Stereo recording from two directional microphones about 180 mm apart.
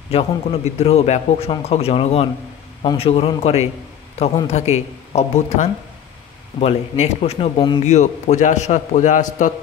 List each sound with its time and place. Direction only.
0.1 s a man's voice: 35° left (ahead or behind)
7.8 s a man's voice: 40° left (ahead or behind)